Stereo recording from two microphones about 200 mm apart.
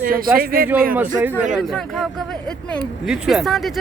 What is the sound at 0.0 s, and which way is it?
Speech, 45° right (ahead or behind).